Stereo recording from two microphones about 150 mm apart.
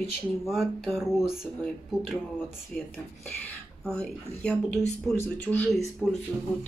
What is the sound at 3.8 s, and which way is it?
Speech, 5° left (ahead or behind).